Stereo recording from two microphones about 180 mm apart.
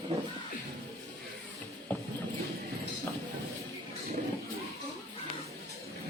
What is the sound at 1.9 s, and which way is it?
Clip-clop, 10° left (ahead or behind).